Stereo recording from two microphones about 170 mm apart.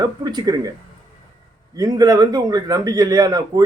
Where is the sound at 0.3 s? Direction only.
25° right (ahead or behind).